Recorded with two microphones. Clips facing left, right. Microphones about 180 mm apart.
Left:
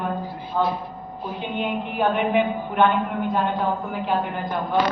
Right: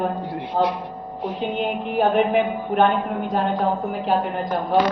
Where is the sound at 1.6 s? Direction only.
40° right (ahead or behind).